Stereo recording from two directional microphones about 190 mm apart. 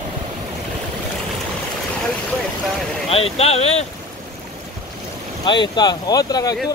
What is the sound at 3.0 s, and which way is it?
Speech, 30° left (ahead or behind).